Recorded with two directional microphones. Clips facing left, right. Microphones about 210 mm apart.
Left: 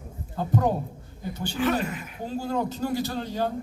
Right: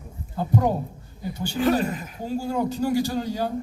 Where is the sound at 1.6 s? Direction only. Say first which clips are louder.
Right 4 dB; 35° right (ahead or behind).